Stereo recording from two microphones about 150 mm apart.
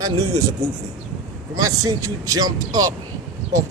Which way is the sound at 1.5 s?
20° right (ahead or behind).